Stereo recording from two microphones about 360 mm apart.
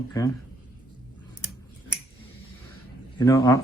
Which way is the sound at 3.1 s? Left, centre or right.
Centre.